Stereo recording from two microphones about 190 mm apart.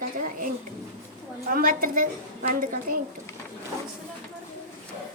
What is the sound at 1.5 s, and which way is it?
A woman's voice, 50° right (ahead or behind).